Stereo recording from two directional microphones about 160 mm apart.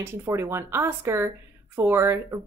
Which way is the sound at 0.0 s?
15° right (ahead or behind).